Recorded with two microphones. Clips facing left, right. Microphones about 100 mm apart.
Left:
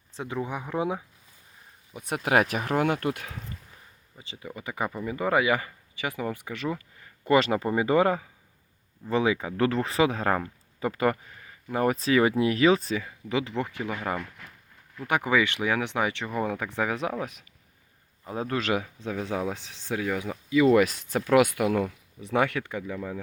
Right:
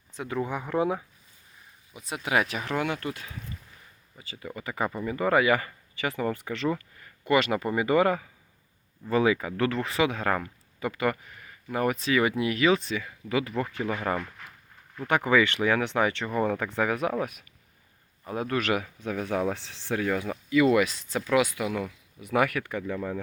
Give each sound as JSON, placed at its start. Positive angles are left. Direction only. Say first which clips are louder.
{"t": 0.3, "sound": "speech", "louder": "right 2 dB", "side_deg": 15}
{"t": 2.0, "sound": "speech", "louder": "left 3 dB", "side_deg": 50}
{"t": 4.2, "sound": "speech", "louder": "right 1 dB", "side_deg": 20}
{"t": 7.3, "sound": "speech", "louder": "left 2 dB", "side_deg": 35}
{"t": 9.6, "sound": "speech", "louder": "left 2 dB", "side_deg": 35}
{"t": 11.9, "sound": "speech", "louder": "left 3 dB", "side_deg": 35}
{"t": 13.1, "sound": "speech", "louder": "even", "side_deg": 20}
{"t": 15.0, "sound": "speech", "louder": "right 2 dB", "side_deg": 15}
{"t": 18.3, "sound": "speech", "louder": "even", "side_deg": 25}
{"t": 20.7, "sound": "speech", "louder": "left 3 dB", "side_deg": 50}
{"t": 22.2, "sound": "speech", "louder": "even", "side_deg": 25}